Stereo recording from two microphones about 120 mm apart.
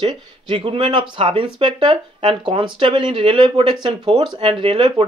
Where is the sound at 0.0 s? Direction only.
45° right (ahead or behind).